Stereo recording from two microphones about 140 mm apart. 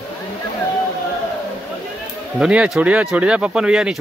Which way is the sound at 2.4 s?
5° right (ahead or behind).